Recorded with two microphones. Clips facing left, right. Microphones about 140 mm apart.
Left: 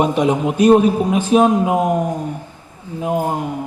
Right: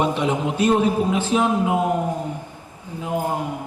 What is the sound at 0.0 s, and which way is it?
A man's voice, 15° left (ahead or behind).